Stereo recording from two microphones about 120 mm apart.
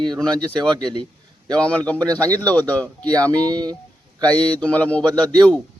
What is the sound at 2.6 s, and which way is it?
Speech, 15° left (ahead or behind).